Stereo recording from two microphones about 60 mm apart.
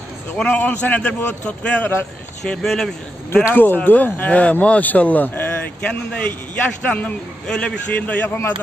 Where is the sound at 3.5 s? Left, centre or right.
Left.